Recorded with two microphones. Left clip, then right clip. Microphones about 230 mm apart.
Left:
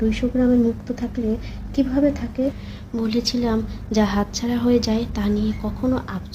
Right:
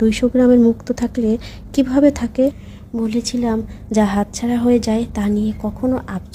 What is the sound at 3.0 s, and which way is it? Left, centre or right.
A woman's voice, right.